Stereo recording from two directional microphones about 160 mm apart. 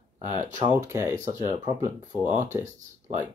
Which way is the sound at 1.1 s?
50° right (ahead or behind).